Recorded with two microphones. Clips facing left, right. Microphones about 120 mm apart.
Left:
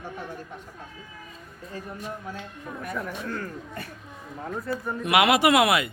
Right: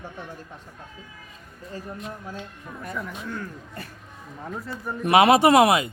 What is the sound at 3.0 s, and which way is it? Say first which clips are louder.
Speech: even; centre (ahead or behind).